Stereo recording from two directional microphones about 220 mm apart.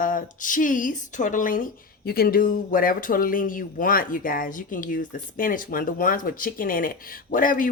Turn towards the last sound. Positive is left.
turn(degrees=40)  # may be behind; listen again after turning